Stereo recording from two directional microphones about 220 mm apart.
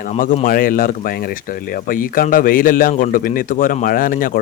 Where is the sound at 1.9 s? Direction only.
40° left (ahead or behind).